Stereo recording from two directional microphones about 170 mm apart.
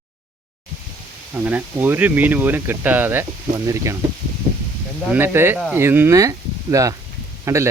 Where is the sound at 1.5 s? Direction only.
10° right (ahead or behind).